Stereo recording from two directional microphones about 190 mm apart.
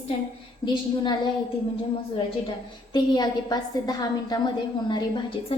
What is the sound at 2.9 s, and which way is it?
A woman's voice, 20° left (ahead or behind).